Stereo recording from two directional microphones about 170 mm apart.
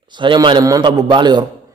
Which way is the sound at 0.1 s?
25° right (ahead or behind).